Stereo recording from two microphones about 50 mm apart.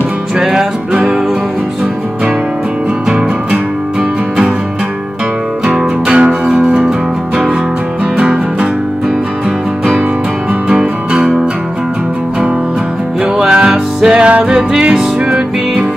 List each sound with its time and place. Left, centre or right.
0.4 s music: centre
5.7 s music: centre
8.2 s music: centre
10.7 s music: centre
13.2 s music: centre